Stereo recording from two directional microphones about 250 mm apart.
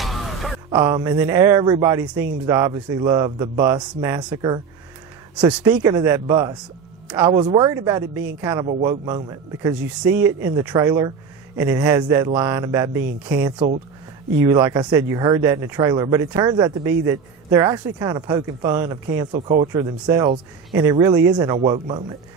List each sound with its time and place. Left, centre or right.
0.0 s music: centre
0.8 s speech: centre
5.5 s speech: centre
9.6 s speech: centre
20.0 s speech: centre